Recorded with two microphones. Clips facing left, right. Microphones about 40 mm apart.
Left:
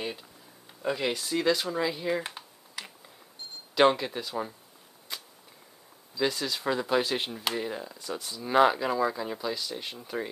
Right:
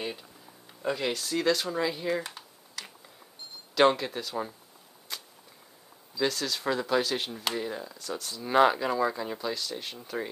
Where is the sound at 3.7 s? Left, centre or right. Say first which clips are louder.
Even; centre.